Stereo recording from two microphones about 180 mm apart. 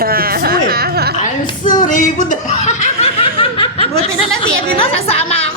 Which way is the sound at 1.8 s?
45° left (ahead or behind).